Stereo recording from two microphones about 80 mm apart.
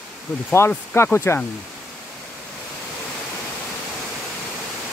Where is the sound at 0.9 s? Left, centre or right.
Left.